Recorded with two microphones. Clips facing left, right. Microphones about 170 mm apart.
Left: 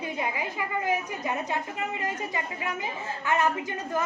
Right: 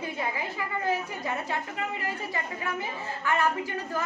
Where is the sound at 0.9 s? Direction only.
15° left (ahead or behind).